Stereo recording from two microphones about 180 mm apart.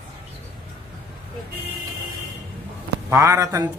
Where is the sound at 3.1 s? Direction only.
15° right (ahead or behind).